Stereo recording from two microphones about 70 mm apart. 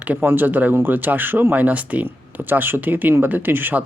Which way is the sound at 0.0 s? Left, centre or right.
Right.